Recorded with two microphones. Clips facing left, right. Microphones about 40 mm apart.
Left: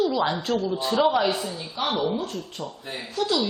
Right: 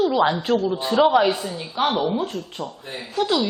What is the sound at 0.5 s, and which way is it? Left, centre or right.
Speech, centre.